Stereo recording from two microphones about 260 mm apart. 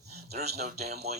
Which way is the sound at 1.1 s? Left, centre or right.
Right.